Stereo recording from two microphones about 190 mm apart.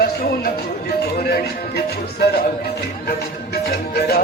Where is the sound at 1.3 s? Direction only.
55° left (ahead or behind).